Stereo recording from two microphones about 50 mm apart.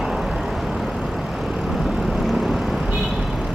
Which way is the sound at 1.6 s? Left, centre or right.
Centre.